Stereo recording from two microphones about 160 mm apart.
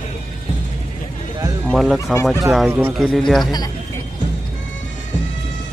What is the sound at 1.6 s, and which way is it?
Fowl, centre (ahead or behind).